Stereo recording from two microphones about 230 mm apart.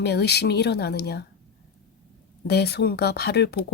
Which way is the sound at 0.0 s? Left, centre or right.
Left.